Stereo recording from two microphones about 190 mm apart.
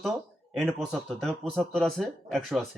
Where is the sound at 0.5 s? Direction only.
Centre (ahead or behind).